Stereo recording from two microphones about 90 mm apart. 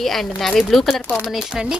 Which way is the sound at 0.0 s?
Centre (ahead or behind).